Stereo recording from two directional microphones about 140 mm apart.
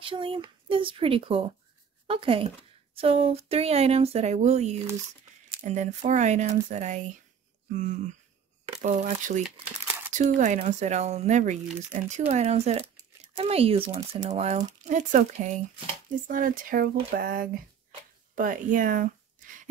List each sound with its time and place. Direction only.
0.0 s speech: 40° right (ahead or behind)
14.9 s speech: 60° right (ahead or behind)
16.3 s speech: 80° right
18.3 s a sound: 70° right (ahead or behind)